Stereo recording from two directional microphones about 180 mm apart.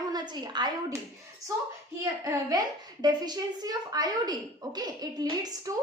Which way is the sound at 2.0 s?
20° right (ahead or behind).